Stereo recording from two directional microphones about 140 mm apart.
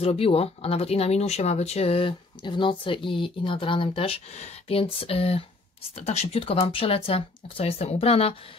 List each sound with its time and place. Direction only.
0.0 s speech: 45° left (ahead or behind)